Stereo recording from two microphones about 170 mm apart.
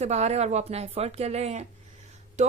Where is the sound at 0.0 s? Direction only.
40° right (ahead or behind).